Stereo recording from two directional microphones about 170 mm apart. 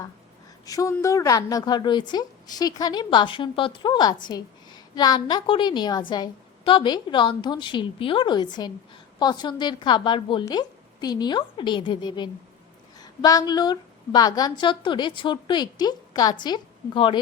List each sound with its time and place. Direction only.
0.6 s a woman's voice: 20° left (ahead or behind)